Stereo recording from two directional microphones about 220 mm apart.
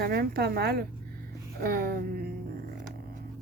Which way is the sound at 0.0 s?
45° right (ahead or behind).